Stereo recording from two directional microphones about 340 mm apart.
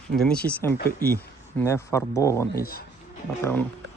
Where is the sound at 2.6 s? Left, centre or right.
Left.